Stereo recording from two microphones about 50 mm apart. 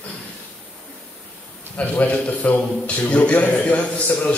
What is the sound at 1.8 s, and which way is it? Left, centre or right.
A man's voice, left.